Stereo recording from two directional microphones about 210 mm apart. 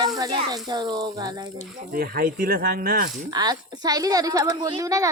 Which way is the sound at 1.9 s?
45° right (ahead or behind).